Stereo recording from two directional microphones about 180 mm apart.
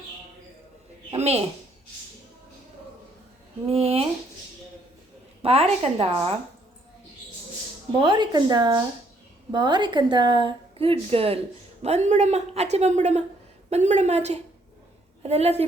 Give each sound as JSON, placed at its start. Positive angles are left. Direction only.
{"t": 1.1, "sound": "a woman's voice", "side_deg": -35}
{"t": 3.7, "sound": "a woman's voice", "side_deg": -30}
{"t": 5.4, "sound": "a woman's voice", "side_deg": -35}
{"t": 8.0, "sound": "a woman's voice", "side_deg": -25}